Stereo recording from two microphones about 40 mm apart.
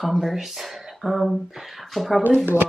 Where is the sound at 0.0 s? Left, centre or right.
Centre.